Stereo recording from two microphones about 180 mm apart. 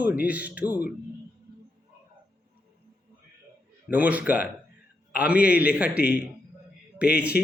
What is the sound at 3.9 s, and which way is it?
Speech, 10° right (ahead or behind).